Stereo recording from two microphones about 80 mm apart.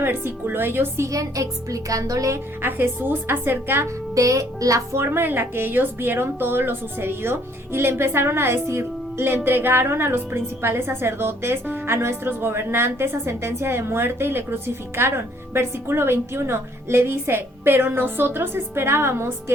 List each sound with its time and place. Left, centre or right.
0.0 s a woman's voice: right
2.6 s speech: right
4.1 s speech: right